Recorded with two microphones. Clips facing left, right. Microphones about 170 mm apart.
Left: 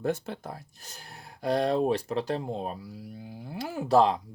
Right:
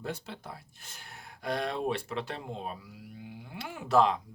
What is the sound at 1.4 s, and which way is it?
Speech, 35° left (ahead or behind).